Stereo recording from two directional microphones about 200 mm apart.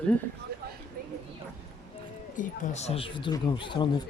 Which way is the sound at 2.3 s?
35° left (ahead or behind).